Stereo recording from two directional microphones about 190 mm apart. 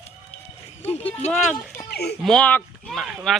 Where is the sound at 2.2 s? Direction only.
5° left (ahead or behind).